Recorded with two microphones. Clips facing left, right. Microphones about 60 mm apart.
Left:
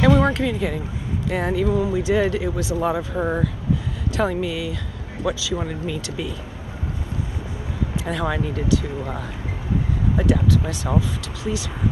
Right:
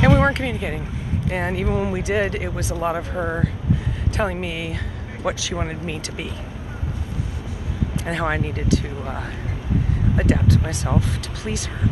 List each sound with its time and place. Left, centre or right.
0.0 s speech: right
0.5 s speech: right
1.3 s speech: right
1.7 s speech: right
3.1 s speech: centre
4.2 s speech: right
5.2 s speech: right
8.0 s speech: right
10.1 s speech: right